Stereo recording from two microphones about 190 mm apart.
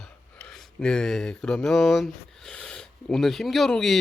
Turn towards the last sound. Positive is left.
turn(degrees=0)  # may be behind; listen again after turning